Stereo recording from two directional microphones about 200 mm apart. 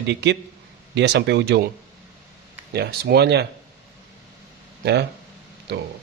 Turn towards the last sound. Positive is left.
turn(degrees=-55)  # may be behind; listen again after turning